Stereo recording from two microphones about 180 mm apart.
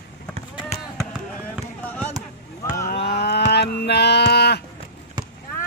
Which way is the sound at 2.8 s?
65° left (ahead or behind).